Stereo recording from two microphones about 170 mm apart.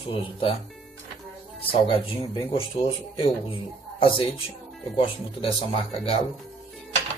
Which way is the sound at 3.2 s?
30° left (ahead or behind).